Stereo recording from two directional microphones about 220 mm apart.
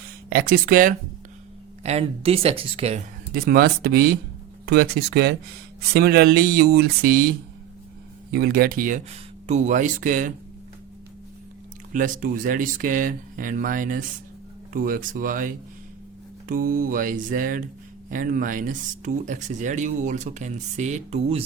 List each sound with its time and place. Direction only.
0.3 s speech: 40° right (ahead or behind)
1.8 s speech: 30° right (ahead or behind)
3.3 s speech: 45° right (ahead or behind)
11.9 s speech: 35° right (ahead or behind)